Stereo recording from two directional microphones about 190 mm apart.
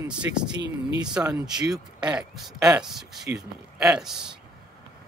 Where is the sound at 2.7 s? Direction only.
Centre (ahead or behind).